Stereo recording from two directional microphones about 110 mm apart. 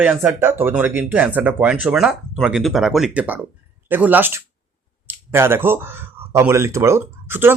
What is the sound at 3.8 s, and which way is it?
Speech, 15° right (ahead or behind).